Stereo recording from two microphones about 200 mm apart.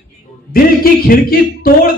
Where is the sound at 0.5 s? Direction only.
45° left (ahead or behind).